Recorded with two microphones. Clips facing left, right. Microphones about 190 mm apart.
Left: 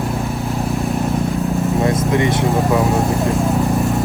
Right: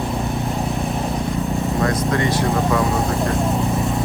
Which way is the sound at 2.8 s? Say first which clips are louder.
Left 3 dB; centre (ahead or behind).